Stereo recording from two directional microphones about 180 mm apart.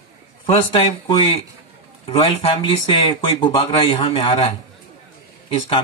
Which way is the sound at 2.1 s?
35° left (ahead or behind).